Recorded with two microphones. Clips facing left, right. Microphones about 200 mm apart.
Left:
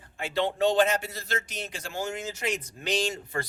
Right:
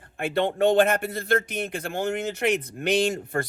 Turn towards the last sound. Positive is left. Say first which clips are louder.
# right 6 dB
turn(degrees=-55)  # may be behind; listen again after turning